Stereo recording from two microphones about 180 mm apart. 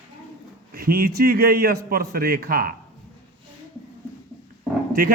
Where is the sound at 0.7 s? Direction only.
55° right (ahead or behind).